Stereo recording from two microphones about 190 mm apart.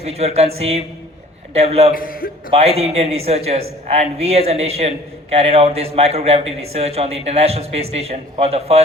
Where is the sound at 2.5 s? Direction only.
35° right (ahead or behind).